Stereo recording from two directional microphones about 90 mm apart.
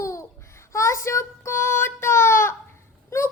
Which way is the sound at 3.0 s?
30° left (ahead or behind).